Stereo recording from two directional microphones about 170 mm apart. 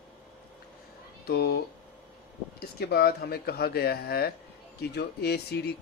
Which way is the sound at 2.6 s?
65° left (ahead or behind).